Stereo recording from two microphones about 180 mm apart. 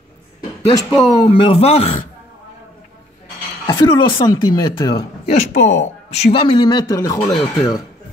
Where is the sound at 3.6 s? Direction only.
25° left (ahead or behind).